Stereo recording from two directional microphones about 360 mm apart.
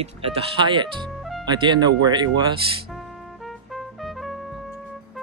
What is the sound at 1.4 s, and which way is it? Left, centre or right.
Speech, centre.